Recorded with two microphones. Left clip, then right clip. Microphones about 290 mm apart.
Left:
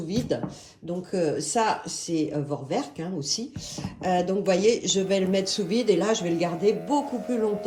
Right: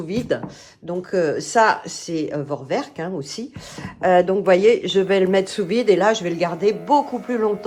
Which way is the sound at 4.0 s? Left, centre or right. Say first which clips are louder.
Right 9 dB; centre.